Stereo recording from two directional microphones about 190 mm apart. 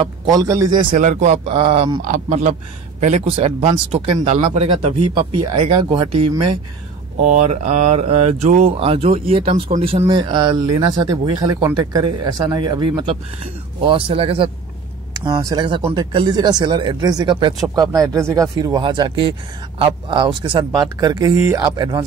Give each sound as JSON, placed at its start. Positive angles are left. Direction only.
{"t": 0.0, "sound": "speech", "side_deg": -20}
{"t": 0.9, "sound": "speech", "side_deg": -40}
{"t": 2.0, "sound": "speech", "side_deg": -45}
{"t": 7.2, "sound": "speech", "side_deg": -40}